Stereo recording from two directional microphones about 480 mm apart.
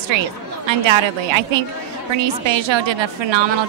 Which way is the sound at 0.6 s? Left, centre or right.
Right.